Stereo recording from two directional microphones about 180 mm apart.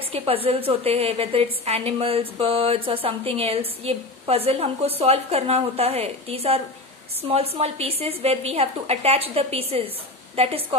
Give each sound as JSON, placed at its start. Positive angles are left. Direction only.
{"t": 0.1, "sound": "a woman's voice", "side_deg": -35}